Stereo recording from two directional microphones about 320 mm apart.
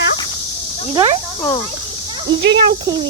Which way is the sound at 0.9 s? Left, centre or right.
Centre.